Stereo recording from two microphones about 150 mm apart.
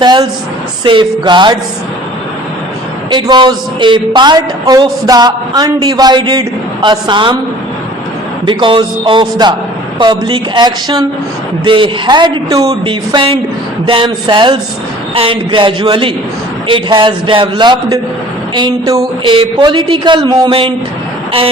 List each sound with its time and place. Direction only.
0.0 s a woman's voice: 30° right (ahead or behind)
3.1 s a woman's voice: 30° right (ahead or behind)
8.4 s a woman's voice: 35° right (ahead or behind)